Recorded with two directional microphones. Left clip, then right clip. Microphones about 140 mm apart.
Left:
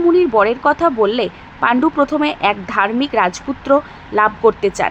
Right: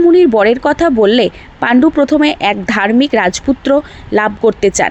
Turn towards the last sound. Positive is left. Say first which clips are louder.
# right 3 dB
turn(degrees=-35)  # may be behind; listen again after turning